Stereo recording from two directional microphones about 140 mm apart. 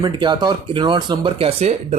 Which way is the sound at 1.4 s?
45° right (ahead or behind).